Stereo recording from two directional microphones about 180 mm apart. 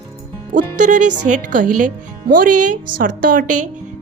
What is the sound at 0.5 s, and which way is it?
A woman's voice, 45° right (ahead or behind).